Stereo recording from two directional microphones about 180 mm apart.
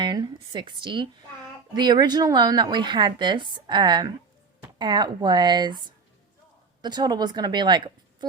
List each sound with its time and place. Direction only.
0.0 s a woman's voice: 25° right (ahead or behind)
6.8 s a woman's voice: 25° right (ahead or behind)